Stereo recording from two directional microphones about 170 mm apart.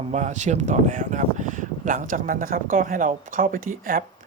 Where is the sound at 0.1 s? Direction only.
45° right (ahead or behind).